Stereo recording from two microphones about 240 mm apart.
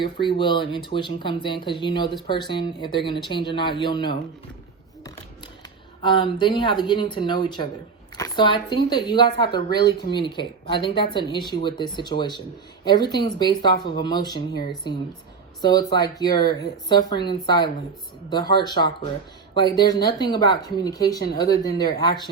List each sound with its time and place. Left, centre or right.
0.0 s speech: centre
6.0 s a woman's voice: centre